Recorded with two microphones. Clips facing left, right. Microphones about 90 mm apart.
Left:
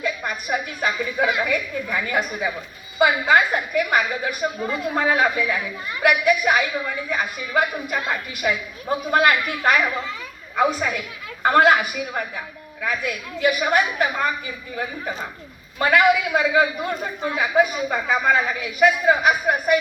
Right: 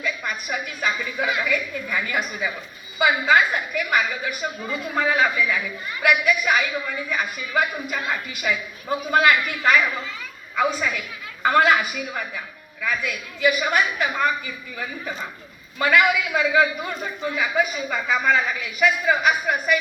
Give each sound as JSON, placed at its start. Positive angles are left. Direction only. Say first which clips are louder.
{"t": 0.0, "sound": "a sound", "louder": "left 2 dB", "side_deg": 30}
{"t": 0.9, "sound": "a man's voice", "louder": "left 3 dB", "side_deg": 20}
{"t": 7.9, "sound": "a man's voice", "louder": "left 2 dB", "side_deg": 20}
{"t": 8.4, "sound": "a woman's voice", "louder": "left 2 dB", "side_deg": 35}
{"t": 12.8, "sound": "a man's voice", "louder": "left 1 dB", "side_deg": 25}
{"t": 16.8, "sound": "a woman's voice", "louder": "left 2 dB", "side_deg": 35}
{"t": 17.3, "sound": "a man's voice", "louder": "left 5 dB", "side_deg": 25}